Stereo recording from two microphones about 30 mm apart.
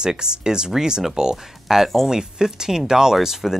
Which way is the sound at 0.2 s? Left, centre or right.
Right.